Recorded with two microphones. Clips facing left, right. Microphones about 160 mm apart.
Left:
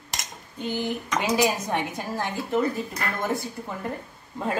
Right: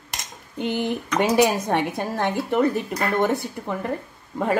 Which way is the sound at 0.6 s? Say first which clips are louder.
Right 4 dB; 65° right (ahead or behind).